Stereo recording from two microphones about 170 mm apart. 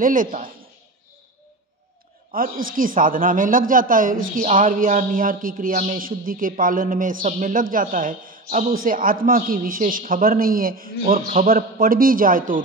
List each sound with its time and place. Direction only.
0.0 s speech: 55° right (ahead or behind)
2.3 s speech: 55° right (ahead or behind)